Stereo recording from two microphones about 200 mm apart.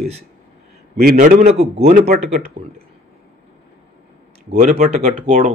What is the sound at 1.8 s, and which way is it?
Speech, 45° right (ahead or behind).